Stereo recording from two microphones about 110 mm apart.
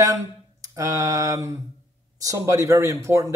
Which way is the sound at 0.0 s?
30° right (ahead or behind).